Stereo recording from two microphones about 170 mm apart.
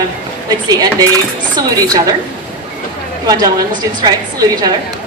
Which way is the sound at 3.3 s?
25° right (ahead or behind).